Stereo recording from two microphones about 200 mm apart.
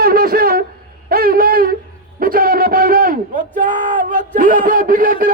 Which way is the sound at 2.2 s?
45° right (ahead or behind).